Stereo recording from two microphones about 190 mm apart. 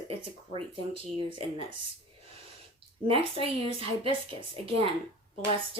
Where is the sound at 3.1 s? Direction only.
30° right (ahead or behind).